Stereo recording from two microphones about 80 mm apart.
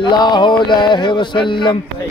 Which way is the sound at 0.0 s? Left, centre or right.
Left.